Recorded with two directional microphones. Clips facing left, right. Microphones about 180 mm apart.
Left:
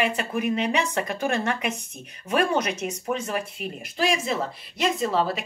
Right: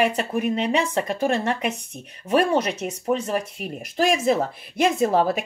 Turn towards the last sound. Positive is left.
turn(degrees=-50)  # may be behind; listen again after turning